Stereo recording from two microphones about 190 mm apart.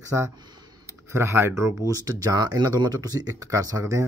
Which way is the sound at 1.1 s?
15° right (ahead or behind).